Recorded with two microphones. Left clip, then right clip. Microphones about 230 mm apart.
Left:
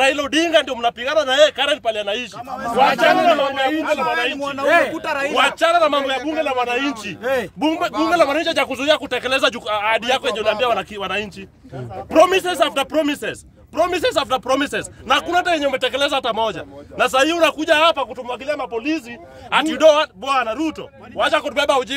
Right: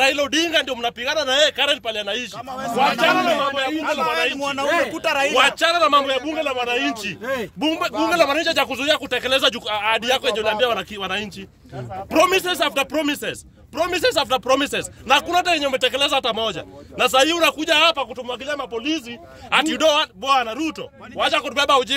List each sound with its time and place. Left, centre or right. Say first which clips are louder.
0.0 s speech: left 1 dB; centre
4.6 s speech: left 6 dB; left
4.9 s speech: right 2 dB; right
5.3 s a man's voice: left 4 dB; centre